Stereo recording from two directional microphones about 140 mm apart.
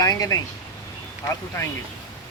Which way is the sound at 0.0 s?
25° left (ahead or behind).